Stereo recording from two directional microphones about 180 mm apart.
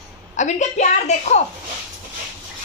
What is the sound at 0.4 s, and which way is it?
A woman's voice, 40° left (ahead or behind).